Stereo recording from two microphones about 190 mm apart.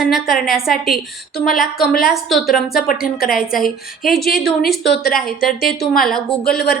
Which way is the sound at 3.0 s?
50° left (ahead or behind).